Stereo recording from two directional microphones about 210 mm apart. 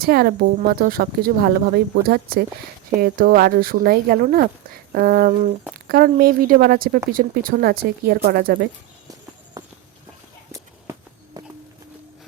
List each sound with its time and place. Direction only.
0.0 s speech: 50° right (ahead or behind)
9.6 s walk: 15° right (ahead or behind)